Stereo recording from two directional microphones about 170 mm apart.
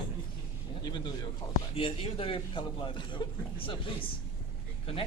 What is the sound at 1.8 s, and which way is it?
A man's voice, 35° left (ahead or behind).